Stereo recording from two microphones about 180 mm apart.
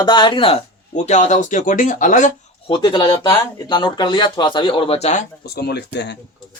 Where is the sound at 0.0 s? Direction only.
25° left (ahead or behind); by 2.3 s 45° left (ahead or behind).